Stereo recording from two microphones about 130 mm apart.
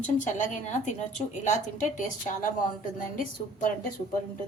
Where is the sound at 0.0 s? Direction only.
70° left (ahead or behind).